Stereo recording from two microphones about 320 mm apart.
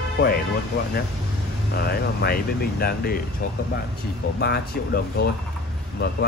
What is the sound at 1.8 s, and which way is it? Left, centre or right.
Speech, left.